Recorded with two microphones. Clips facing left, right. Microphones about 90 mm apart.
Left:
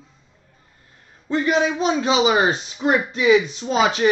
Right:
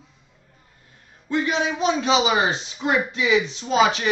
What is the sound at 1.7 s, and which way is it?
A man's voice, 30° left (ahead or behind).